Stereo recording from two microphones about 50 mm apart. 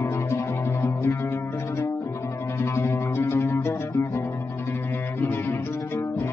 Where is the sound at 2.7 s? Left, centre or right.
Left.